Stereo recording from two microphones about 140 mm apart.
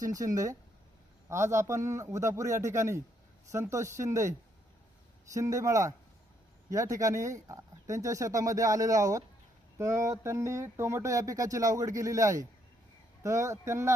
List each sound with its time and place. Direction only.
0.0 s speech: 25° right (ahead or behind)
1.3 s speech: 20° right (ahead or behind)